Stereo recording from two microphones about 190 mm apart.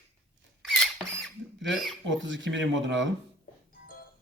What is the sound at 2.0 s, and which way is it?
Speech, 75° right (ahead or behind).